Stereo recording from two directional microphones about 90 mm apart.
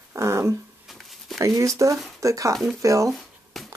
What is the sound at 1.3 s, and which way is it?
Speech, 40° right (ahead or behind).